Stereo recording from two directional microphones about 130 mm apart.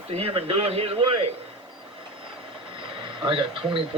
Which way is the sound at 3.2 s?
40° right (ahead or behind).